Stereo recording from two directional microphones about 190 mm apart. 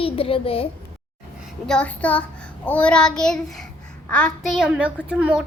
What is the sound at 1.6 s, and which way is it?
A child's voice, 5° left (ahead or behind).